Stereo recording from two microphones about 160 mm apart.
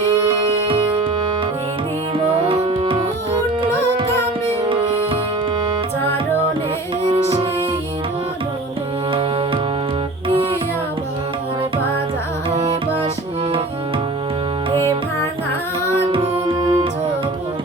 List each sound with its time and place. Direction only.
2.2 s tabla: 40° right (ahead or behind)
7.0 s music: 40° right (ahead or behind)
12.5 s music: 40° right (ahead or behind)
16.0 s music: 35° right (ahead or behind)